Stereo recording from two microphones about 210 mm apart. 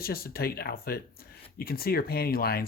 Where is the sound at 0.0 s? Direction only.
45° left (ahead or behind).